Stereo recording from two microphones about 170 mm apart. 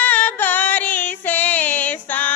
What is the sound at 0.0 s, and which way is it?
Music, 10° left (ahead or behind).